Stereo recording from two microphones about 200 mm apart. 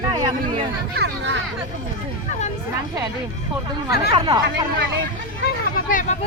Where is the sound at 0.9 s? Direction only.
55° right (ahead or behind).